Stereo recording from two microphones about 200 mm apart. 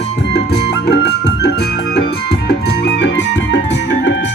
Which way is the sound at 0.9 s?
60° left (ahead or behind).